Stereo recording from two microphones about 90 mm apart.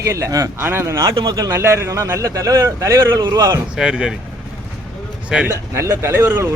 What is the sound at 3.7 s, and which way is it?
Speech, 10° right (ahead or behind).